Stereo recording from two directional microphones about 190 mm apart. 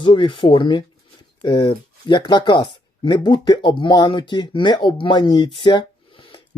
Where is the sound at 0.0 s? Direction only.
25° left (ahead or behind).